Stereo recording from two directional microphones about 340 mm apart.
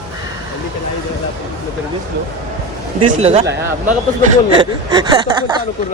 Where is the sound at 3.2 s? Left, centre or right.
Centre.